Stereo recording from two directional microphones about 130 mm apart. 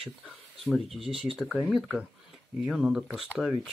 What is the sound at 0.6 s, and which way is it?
Speech, centre (ahead or behind).